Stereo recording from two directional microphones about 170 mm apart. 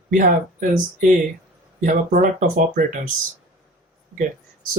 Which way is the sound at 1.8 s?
50° right (ahead or behind).